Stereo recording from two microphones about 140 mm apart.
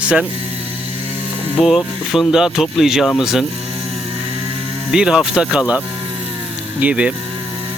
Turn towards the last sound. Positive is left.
turn(degrees=-10)  # may be behind; listen again after turning